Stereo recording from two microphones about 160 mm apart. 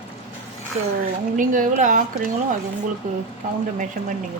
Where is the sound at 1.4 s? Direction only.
55° right (ahead or behind).